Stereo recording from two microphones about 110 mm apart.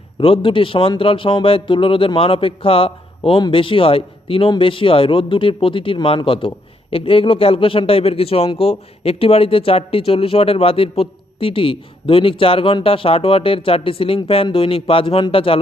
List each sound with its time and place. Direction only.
0.2 s speech: 55° left (ahead or behind)